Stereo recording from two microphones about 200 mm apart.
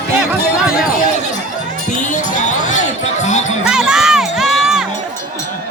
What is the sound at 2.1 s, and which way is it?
Music, 35° left (ahead or behind).